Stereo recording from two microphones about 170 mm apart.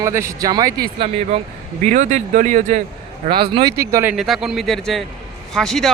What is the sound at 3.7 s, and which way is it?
Speech, 15° right (ahead or behind).